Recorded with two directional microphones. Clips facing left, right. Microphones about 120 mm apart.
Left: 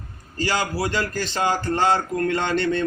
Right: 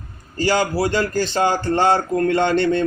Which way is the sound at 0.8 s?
30° right (ahead or behind).